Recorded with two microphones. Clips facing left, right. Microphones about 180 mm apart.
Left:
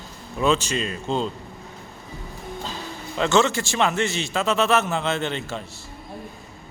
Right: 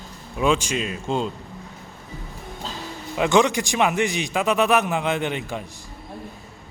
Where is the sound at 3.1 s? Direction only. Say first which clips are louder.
Right 1 dB; 15° right (ahead or behind).